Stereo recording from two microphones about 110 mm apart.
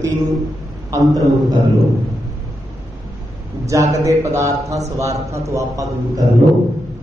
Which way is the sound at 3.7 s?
30° right (ahead or behind).